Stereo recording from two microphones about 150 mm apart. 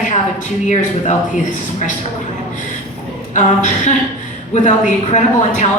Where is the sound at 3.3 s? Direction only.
55° left (ahead or behind).